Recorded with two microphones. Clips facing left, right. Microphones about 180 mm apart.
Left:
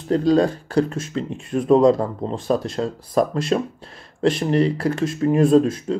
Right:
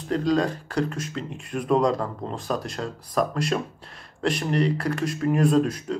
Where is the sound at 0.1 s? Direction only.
30° left (ahead or behind).